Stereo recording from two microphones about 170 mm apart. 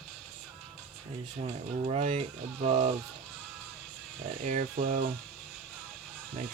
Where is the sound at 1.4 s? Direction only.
35° right (ahead or behind).